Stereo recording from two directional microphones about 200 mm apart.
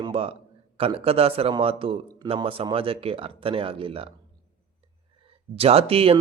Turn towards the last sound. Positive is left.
turn(degrees=-30)  # may be behind; listen again after turning